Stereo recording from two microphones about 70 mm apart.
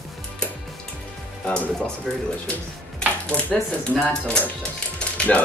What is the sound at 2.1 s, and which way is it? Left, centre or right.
Speech, centre.